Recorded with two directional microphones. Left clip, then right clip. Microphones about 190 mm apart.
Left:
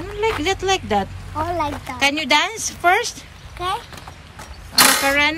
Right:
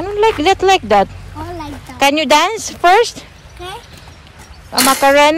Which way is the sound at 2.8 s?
5° left (ahead or behind).